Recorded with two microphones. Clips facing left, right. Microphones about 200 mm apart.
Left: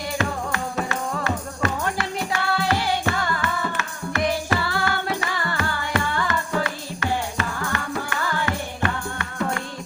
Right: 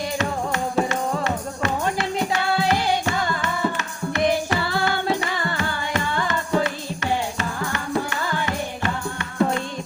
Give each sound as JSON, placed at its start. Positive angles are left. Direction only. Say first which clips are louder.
{"t": 0.2, "sound": "music", "louder": "even", "side_deg": -20}
{"t": 8.4, "sound": "music", "louder": "even", "side_deg": -20}